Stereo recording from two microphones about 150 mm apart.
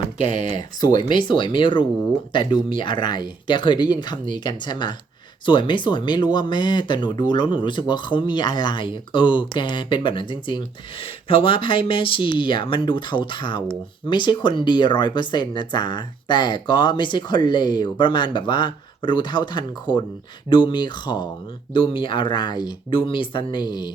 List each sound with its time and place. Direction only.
0.2 s speech: 55° right (ahead or behind)
0.5 s speech: 25° left (ahead or behind)